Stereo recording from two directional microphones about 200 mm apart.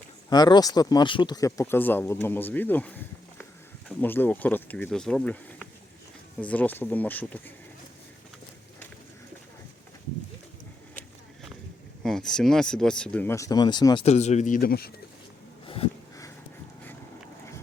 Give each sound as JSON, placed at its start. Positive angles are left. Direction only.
{"t": 0.3, "sound": "speech", "side_deg": 20}
{"t": 12.0, "sound": "speech", "side_deg": 0}
{"t": 15.6, "sound": "a sound", "side_deg": 25}